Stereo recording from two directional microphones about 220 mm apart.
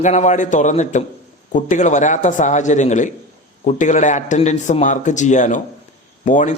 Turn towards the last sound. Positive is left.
turn(degrees=35)  # may be behind; listen again after turning